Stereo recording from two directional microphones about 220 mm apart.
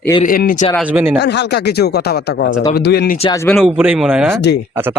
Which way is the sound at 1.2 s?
50° left (ahead or behind).